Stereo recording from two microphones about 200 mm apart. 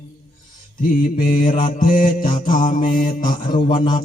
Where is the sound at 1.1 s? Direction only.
40° left (ahead or behind).